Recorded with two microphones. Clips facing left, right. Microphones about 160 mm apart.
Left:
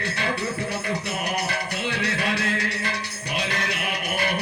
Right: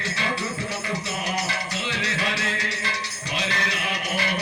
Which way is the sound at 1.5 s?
60° left (ahead or behind).